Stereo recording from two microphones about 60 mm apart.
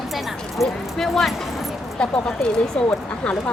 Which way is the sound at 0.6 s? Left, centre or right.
Centre.